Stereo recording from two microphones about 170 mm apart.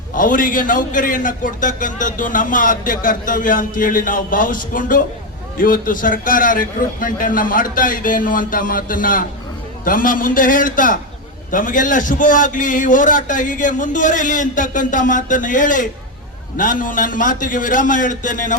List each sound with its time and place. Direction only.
0.1 s a man's voice: 55° left (ahead or behind)